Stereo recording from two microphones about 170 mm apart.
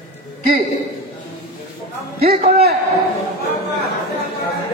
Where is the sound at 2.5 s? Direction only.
65° right (ahead or behind).